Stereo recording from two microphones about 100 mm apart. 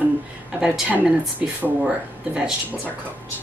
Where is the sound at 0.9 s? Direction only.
10° right (ahead or behind).